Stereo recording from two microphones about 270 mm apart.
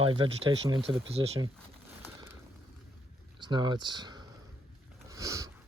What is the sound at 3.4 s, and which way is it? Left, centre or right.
Speech, centre.